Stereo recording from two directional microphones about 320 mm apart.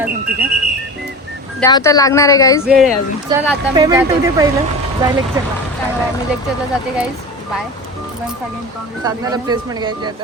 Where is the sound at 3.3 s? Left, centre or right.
Centre.